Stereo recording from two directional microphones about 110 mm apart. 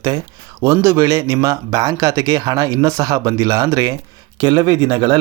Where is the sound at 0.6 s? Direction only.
25° right (ahead or behind).